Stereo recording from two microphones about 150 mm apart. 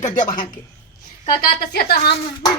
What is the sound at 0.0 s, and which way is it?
Speech, 60° left (ahead or behind).